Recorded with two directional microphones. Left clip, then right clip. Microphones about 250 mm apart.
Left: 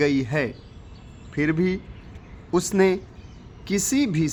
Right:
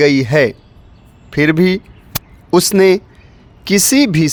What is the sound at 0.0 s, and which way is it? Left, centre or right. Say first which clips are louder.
A man's voice: right 12 dB; right.